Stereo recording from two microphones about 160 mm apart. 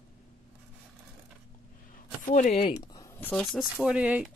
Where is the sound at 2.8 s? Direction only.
25° left (ahead or behind).